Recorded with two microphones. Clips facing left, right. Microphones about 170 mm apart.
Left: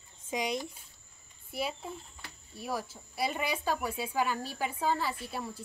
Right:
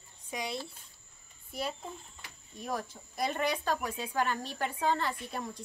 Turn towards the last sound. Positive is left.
turn(degrees=5)  # may be behind; listen again after turning